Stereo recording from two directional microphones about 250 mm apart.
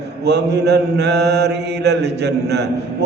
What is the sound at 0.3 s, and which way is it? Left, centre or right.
Mantra, right.